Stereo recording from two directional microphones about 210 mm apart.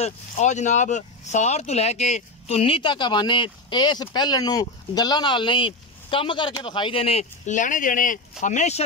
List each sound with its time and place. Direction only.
0.0 s speech: 35° left (ahead or behind)